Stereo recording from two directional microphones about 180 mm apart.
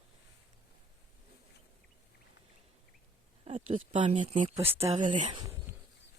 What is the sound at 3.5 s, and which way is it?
Speech, 40° right (ahead or behind).